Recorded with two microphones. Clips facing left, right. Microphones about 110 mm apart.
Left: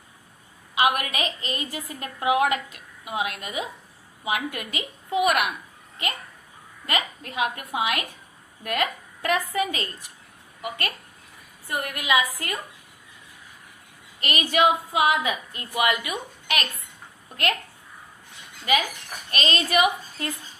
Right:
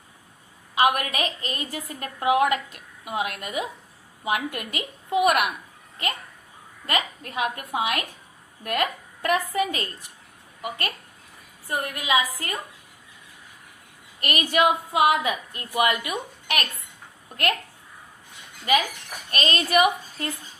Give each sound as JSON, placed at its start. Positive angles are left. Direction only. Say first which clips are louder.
{"t": 0.8, "sound": "a woman's voice", "louder": "right 1 dB", "side_deg": -40}
{"t": 6.8, "sound": "a woman's voice", "louder": "right 1 dB", "side_deg": -40}
{"t": 14.2, "sound": "a woman's voice", "louder": "even", "side_deg": -50}
{"t": 19.3, "sound": "a woman's voice", "louder": "right 1 dB", "side_deg": -45}